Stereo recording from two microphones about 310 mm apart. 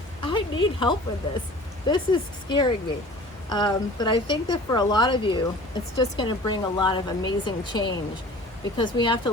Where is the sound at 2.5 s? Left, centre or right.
Centre.